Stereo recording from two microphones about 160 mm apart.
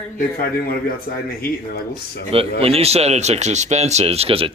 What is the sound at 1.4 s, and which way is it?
Speech, 70° left (ahead or behind).